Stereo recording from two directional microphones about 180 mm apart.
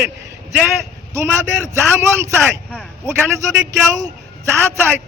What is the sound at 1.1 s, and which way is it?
Speech, 15° right (ahead or behind).